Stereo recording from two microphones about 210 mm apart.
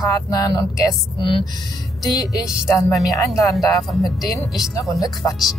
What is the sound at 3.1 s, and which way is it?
Speech, centre (ahead or behind).